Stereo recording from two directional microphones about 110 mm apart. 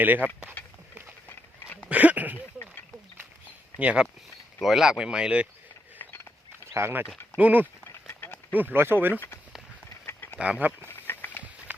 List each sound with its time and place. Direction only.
0.0 s speech: 15° right (ahead or behind)
1.3 s dog: 15° left (ahead or behind)
1.9 s a sound: 15° right (ahead or behind)
3.8 s speech: 10° right (ahead or behind)
6.7 s speech: 25° right (ahead or behind)
7.9 s a sound: 25° left (ahead or behind)
8.5 s speech: 20° right (ahead or behind)
10.3 s speech: 10° right (ahead or behind)
10.8 s a sound: 20° left (ahead or behind)